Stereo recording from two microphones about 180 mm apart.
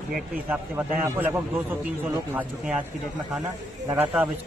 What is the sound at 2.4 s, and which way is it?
Speech, 5° right (ahead or behind).